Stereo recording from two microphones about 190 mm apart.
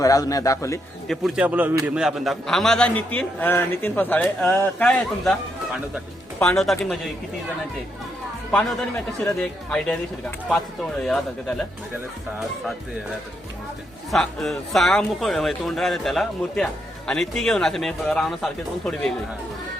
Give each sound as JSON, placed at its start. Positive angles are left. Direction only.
{"t": 0.0, "sound": "a man's voice", "side_deg": 20}
{"t": 1.0, "sound": "a man's voice", "side_deg": 0}
{"t": 9.4, "sound": "speech", "side_deg": 5}
{"t": 11.0, "sound": "speech", "side_deg": 5}
{"t": 14.1, "sound": "speech", "side_deg": 0}